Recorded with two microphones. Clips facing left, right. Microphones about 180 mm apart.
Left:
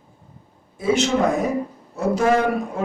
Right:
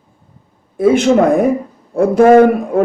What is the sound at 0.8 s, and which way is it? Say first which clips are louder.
A man's voice: right 9 dB; 55° right (ahead or behind).